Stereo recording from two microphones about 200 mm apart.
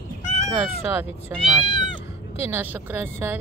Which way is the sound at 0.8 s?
10° right (ahead or behind).